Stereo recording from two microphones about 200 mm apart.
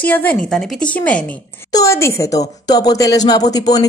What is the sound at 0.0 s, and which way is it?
A woman's voice, 10° left (ahead or behind).